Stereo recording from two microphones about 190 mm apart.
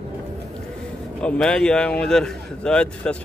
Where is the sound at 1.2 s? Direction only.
5° left (ahead or behind).